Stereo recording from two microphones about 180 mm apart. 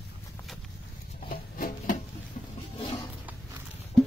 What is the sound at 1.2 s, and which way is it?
Music, 55° left (ahead or behind).